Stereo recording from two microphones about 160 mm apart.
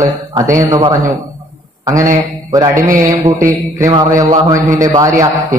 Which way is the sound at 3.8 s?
20° right (ahead or behind).